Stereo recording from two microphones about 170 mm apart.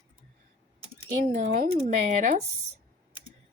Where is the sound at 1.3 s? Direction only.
40° right (ahead or behind).